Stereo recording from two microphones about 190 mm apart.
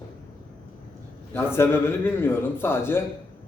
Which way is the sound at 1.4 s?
15° left (ahead or behind).